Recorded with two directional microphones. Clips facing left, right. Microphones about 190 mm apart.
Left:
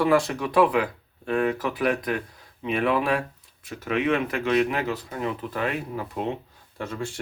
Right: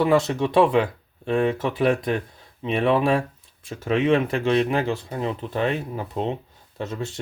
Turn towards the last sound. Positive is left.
turn(degrees=-20)  # may be behind; listen again after turning